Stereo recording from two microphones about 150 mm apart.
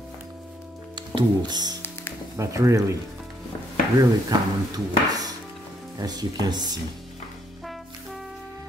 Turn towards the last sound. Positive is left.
turn(degrees=-30)  # may be behind; listen again after turning